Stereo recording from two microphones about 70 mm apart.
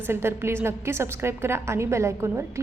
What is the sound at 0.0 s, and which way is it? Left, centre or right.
A woman's voice, right.